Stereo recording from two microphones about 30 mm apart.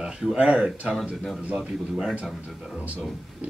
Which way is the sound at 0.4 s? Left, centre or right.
Right.